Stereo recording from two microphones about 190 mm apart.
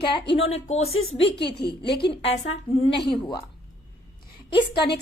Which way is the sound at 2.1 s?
35° left (ahead or behind).